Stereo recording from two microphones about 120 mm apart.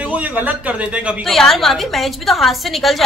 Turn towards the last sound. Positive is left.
turn(degrees=0)  # may be behind; listen again after turning